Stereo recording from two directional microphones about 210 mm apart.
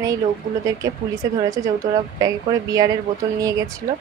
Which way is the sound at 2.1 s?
15° right (ahead or behind).